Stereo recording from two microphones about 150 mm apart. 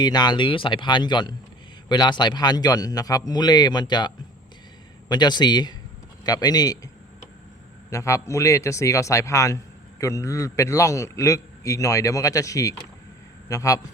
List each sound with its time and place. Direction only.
0.0 s a man's voice: 30° left (ahead or behind)